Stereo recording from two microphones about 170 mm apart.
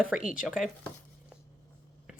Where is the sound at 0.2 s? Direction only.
50° left (ahead or behind).